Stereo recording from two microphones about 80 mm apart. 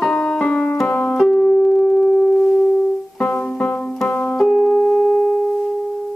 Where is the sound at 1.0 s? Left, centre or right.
Centre.